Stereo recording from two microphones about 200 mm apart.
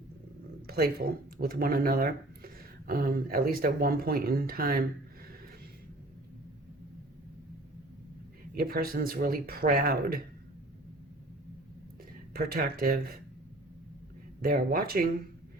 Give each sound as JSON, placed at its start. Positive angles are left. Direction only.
{"t": 0.7, "sound": "speech", "side_deg": -50}
{"t": 8.5, "sound": "speech", "side_deg": -50}
{"t": 12.3, "sound": "speech", "side_deg": -50}
{"t": 14.4, "sound": "speech", "side_deg": -45}